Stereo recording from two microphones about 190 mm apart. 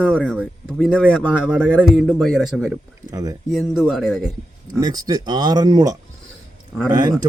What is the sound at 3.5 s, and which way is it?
Speech, centre (ahead or behind).